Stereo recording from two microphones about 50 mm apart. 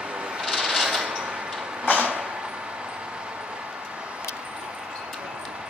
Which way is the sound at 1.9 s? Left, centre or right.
Right.